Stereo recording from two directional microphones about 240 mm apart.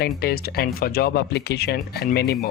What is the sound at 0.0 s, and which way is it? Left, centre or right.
Speech, left.